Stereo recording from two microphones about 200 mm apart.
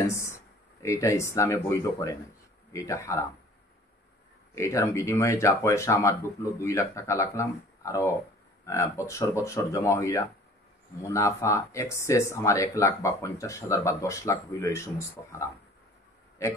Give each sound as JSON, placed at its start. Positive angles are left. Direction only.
{"t": 0.0, "sound": "speech", "side_deg": 15}
{"t": 4.6, "sound": "speech", "side_deg": 15}